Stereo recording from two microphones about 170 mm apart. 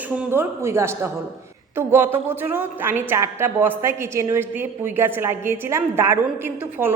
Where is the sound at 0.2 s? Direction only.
15° right (ahead or behind).